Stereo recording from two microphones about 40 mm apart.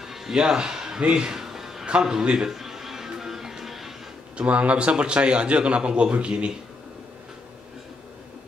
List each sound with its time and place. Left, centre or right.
0.0 s music: centre
0.4 s a man's voice: centre
1.3 s a sound: centre
1.9 s a man's voice: centre
2.5 s music: centre
4.4 s a man's voice: right